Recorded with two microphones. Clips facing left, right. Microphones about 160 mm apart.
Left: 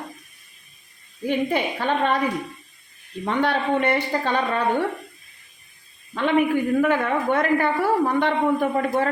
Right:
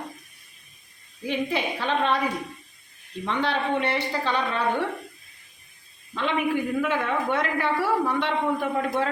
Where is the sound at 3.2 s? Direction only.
50° left (ahead or behind).